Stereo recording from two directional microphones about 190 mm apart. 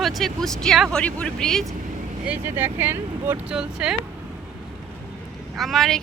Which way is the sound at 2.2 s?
10° right (ahead or behind).